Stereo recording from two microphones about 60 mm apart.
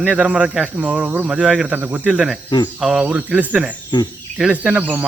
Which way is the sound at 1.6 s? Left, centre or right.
Right.